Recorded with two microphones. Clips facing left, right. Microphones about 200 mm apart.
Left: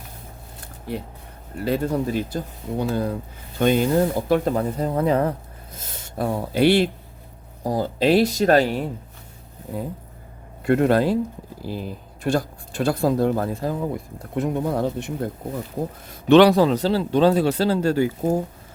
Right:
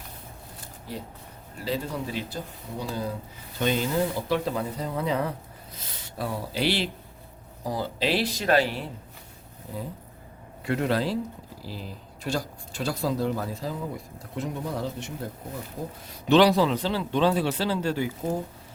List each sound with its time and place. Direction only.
0.9 s speech: 60° left (ahead or behind)
2.9 s speech: 60° left (ahead or behind)
10.6 s speech: 50° left (ahead or behind)
16.3 s speech: 55° left (ahead or behind)